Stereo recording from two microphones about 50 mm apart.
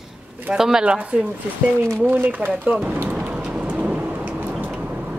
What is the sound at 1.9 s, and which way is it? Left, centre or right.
Speech, right.